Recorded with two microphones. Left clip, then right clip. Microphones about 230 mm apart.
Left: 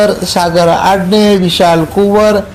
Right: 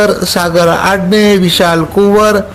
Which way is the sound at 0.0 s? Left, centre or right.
Right.